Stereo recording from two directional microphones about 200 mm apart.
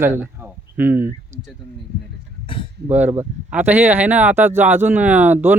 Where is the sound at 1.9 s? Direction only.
55° right (ahead or behind).